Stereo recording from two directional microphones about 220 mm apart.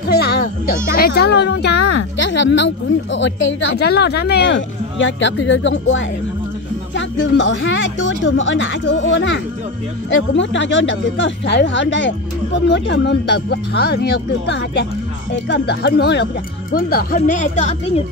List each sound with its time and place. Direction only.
0.1 s music: 45° left (ahead or behind)
0.9 s speech: 45° left (ahead or behind); by 18.0 s 30° left (ahead or behind)